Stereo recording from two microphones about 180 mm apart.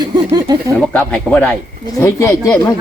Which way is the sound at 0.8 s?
5° left (ahead or behind).